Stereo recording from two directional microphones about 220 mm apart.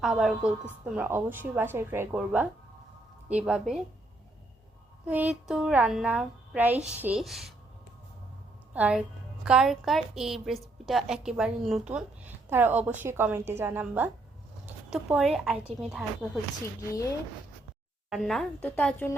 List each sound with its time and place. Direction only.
0.0 s a woman's voice: centre (ahead or behind)
5.0 s a woman's voice: 5° right (ahead or behind)
8.7 s a woman's voice: 5° right (ahead or behind)
18.1 s a woman's voice: centre (ahead or behind)